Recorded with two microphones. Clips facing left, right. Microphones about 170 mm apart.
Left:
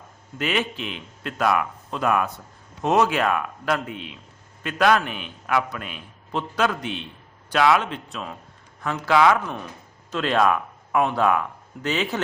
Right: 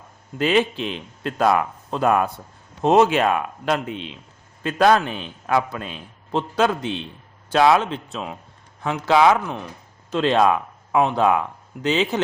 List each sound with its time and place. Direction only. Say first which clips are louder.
0.3 s a man's voice: right 6 dB; 30° right (ahead or behind)